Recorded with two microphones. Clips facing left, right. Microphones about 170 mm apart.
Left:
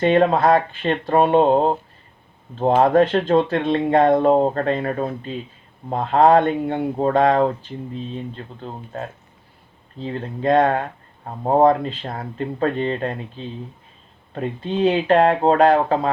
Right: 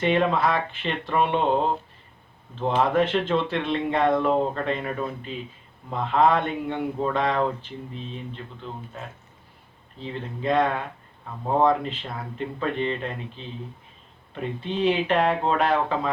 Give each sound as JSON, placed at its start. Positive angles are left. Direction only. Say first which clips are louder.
{"t": 0.0, "sound": "speech", "louder": "left 6 dB", "side_deg": 45}
{"t": 10.0, "sound": "speech", "louder": "left 6 dB", "side_deg": 45}